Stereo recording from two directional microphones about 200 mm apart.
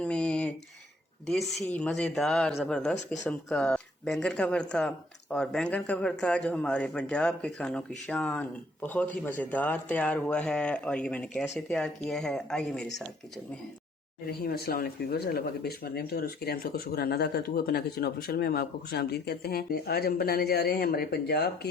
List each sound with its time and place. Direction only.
0.0 s a sound: 5° left (ahead or behind)
1.3 s a man's voice: centre (ahead or behind)
14.3 s speech: 50° left (ahead or behind)